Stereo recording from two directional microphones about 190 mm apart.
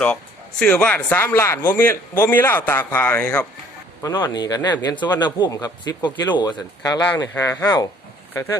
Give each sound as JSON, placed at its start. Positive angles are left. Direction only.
{"t": 0.6, "sound": "a man's voice", "side_deg": 5}
{"t": 4.0, "sound": "speech", "side_deg": 25}